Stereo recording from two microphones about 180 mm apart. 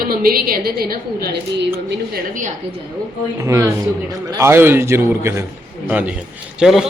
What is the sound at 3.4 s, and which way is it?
A man's voice, 15° right (ahead or behind).